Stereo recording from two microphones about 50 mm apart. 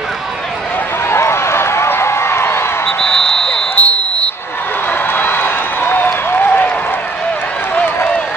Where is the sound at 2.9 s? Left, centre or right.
Centre.